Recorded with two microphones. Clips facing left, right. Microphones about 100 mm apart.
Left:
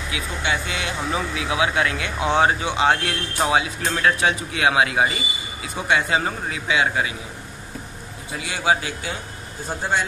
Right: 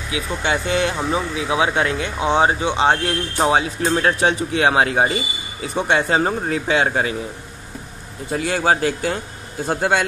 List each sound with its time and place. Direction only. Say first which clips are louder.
0.1 s speech: right 4 dB; 35° right (ahead or behind)
8.3 s speech: right 4 dB; 45° right (ahead or behind)
9.7 s speech: right 5 dB; 75° right (ahead or behind)